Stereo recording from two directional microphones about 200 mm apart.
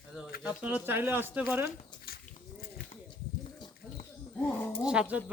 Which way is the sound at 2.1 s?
50° left (ahead or behind).